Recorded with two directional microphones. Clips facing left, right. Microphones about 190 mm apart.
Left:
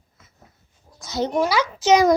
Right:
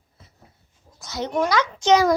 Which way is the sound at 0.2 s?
30° right (ahead or behind).